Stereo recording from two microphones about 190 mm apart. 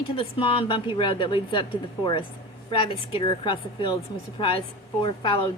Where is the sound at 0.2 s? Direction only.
25° left (ahead or behind).